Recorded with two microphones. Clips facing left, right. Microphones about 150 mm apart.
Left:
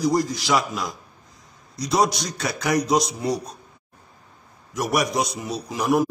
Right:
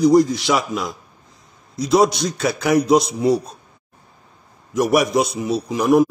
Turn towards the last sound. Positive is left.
turn(degrees=0)  # may be behind; listen again after turning